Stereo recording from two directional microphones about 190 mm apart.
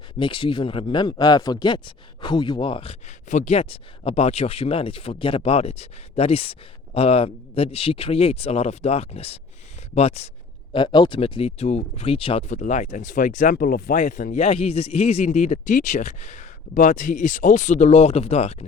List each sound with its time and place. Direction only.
0.2 s speech: 25° left (ahead or behind)